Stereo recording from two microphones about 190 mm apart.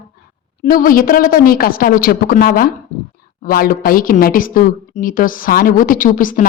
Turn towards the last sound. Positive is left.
turn(degrees=45)  # may be behind; listen again after turning